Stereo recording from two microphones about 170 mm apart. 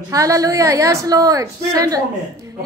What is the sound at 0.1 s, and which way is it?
A woman's voice, 20° right (ahead or behind).